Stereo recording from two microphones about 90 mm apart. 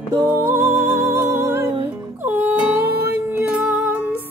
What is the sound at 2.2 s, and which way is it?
Music, 20° right (ahead or behind).